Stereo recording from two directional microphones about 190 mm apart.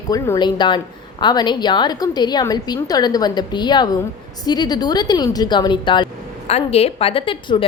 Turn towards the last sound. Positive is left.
turn(degrees=30)  # may be behind; listen again after turning